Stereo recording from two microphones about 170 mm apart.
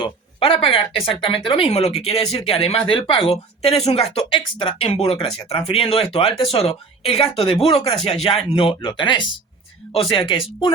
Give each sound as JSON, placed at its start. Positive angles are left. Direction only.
{"t": 0.0, "sound": "speech", "side_deg": 30}